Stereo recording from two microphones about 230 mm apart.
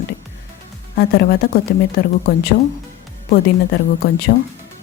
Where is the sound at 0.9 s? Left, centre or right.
Left.